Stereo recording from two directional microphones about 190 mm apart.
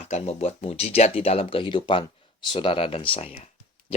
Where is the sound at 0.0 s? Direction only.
35° left (ahead or behind).